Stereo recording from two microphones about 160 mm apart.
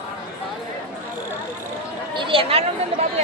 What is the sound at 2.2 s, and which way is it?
Speech, 35° right (ahead or behind).